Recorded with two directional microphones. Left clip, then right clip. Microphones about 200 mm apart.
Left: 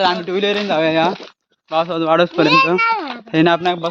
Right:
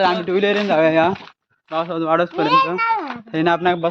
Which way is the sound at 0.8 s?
15° left (ahead or behind).